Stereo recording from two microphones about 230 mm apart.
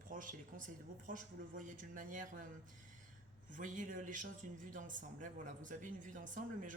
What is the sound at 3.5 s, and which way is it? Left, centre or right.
A man's voice, right.